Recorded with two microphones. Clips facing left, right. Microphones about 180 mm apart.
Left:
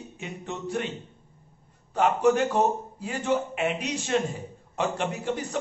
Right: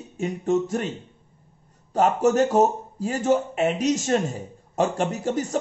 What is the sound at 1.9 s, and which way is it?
A man's voice, 40° right (ahead or behind).